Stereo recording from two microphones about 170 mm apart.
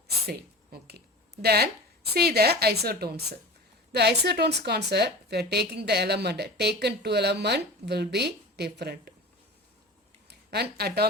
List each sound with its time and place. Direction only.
0.3 s a sound: 70° right (ahead or behind)
2.1 s a woman's voice: 70° right (ahead or behind)
10.2 s speech: 75° right (ahead or behind)